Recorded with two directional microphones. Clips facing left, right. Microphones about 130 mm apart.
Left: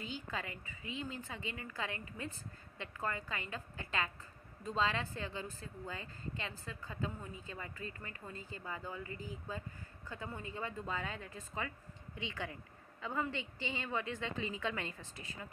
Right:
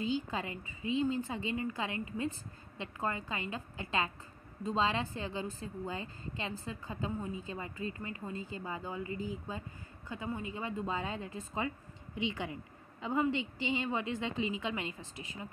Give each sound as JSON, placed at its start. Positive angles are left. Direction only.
{"t": 0.0, "sound": "a woman's voice", "side_deg": -25}